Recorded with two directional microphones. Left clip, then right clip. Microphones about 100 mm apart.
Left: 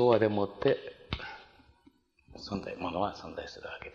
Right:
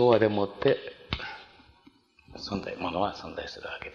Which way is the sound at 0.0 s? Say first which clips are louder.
Right 3 dB; 40° left (ahead or behind).